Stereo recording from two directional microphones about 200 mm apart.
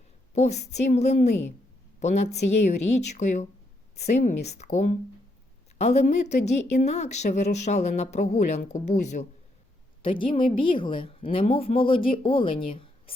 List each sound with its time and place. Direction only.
0.3 s a woman's voice: 35° left (ahead or behind)
10.0 s speech: 25° left (ahead or behind)